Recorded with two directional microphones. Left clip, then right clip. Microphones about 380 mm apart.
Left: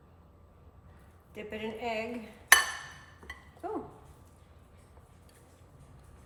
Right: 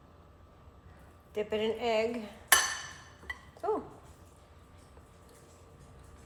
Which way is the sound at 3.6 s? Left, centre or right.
Centre.